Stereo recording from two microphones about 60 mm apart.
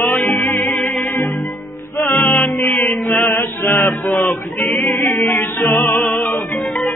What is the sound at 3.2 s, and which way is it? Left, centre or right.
Chant, left.